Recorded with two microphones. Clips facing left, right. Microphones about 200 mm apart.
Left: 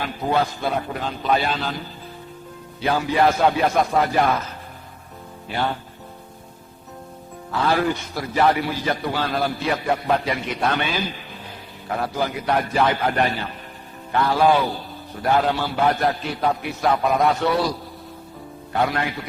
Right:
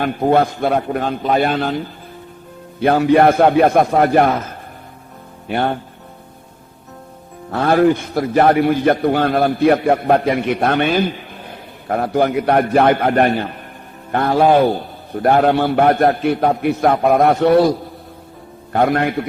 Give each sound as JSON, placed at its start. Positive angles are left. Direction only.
{"t": 0.0, "sound": "a man's voice", "side_deg": -55}
{"t": 2.8, "sound": "a man's voice", "side_deg": -60}
{"t": 7.5, "sound": "a man's voice", "side_deg": -55}